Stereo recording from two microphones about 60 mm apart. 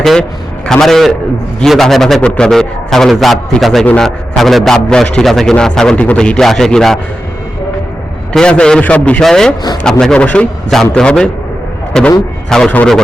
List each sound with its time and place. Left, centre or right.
0.7 s a man's voice: centre
2.2 s a man's voice: centre
2.5 s a man's voice: centre
8.3 s a man's voice: centre
9.2 s a man's voice: centre
10.2 s a man's voice: left
10.9 s a man's voice: centre